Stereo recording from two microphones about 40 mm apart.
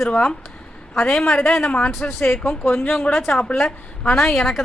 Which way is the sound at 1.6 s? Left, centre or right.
Left.